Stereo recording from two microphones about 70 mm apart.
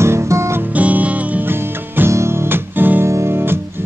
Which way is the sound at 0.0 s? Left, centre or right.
Right.